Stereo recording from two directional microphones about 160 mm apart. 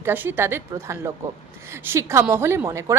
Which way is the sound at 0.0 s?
15° right (ahead or behind).